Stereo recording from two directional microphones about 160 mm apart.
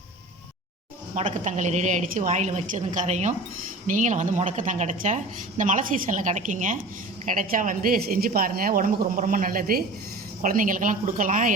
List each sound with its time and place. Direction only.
1.3 s a woman's voice: 50° right (ahead or behind)